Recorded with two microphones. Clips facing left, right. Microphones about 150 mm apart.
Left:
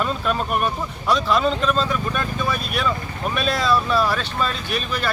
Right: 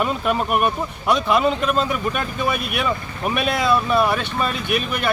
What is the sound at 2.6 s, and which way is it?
Speech, 60° right (ahead or behind).